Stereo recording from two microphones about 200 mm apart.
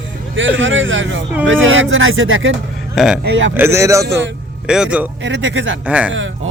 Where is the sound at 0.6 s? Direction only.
70° right (ahead or behind).